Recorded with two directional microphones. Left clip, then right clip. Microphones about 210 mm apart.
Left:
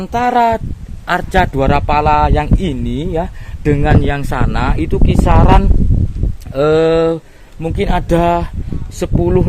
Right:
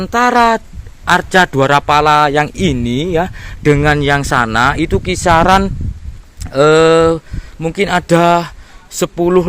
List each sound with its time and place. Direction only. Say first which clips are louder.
0.0 s a man's voice: right 2 dB; 25° right (ahead or behind)